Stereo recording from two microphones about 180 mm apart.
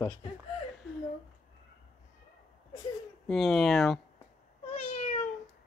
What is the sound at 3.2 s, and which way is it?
Speech, centre (ahead or behind).